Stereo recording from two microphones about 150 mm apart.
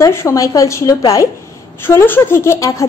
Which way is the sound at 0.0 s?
20° left (ahead or behind).